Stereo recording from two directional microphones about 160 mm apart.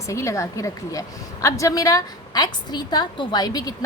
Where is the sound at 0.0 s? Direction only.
20° left (ahead or behind).